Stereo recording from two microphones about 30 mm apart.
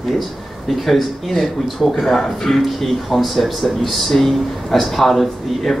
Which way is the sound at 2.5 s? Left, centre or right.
Centre.